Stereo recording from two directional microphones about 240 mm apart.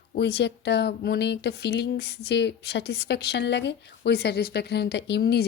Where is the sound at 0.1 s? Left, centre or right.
Left.